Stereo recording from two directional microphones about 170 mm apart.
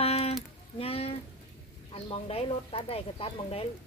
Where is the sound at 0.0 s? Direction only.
35° left (ahead or behind).